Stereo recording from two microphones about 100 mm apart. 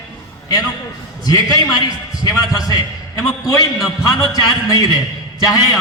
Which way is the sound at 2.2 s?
40° left (ahead or behind).